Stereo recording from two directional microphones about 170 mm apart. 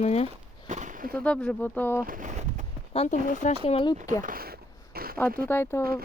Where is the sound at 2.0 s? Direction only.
50° right (ahead or behind).